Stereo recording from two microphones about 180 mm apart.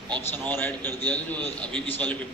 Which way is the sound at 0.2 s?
10° left (ahead or behind).